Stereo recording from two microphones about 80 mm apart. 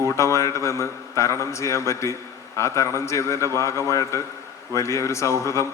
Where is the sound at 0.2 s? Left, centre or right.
Left.